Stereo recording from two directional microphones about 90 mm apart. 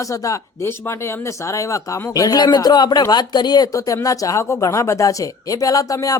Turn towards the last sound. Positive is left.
turn(degrees=40)  # may be behind; listen again after turning